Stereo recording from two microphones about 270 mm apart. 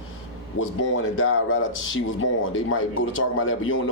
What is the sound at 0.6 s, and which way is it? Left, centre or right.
Speech, left.